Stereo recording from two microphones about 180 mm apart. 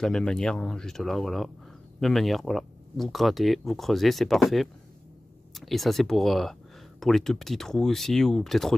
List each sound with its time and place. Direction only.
0.0 s speech: 5° left (ahead or behind)